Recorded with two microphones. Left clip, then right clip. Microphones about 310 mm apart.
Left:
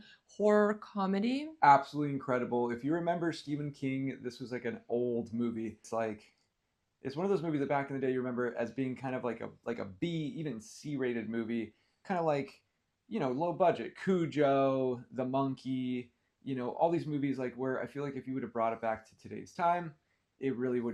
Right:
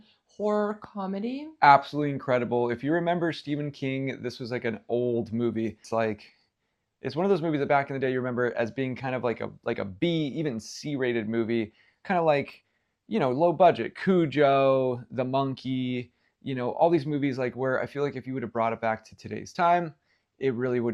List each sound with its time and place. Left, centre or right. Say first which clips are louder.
0.0 s speech: right 1 dB; centre
1.5 s speech: right 6 dB; right
13.1 s speech: right 10 dB; right